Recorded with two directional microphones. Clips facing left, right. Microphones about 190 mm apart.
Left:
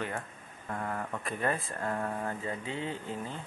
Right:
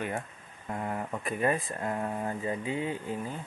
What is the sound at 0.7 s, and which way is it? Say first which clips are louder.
Speech: right 2 dB; 20° right (ahead or behind).